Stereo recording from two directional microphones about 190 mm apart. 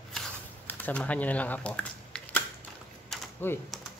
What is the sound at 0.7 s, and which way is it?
Speech, 10° left (ahead or behind).